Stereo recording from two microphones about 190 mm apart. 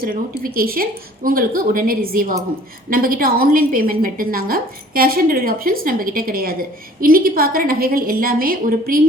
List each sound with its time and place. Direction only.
0.0 s a woman's voice: 50° right (ahead or behind)